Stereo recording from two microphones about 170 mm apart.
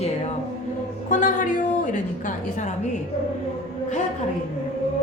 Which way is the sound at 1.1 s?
50° left (ahead or behind).